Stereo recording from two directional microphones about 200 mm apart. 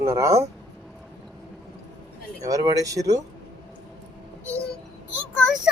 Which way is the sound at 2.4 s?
15° right (ahead or behind).